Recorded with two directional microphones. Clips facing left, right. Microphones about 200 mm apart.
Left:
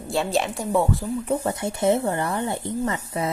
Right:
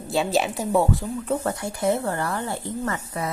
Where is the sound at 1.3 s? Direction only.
20° left (ahead or behind).